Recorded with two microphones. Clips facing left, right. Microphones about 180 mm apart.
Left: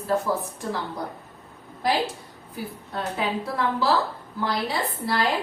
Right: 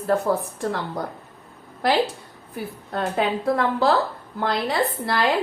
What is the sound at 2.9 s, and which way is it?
A woman's voice, 60° right (ahead or behind).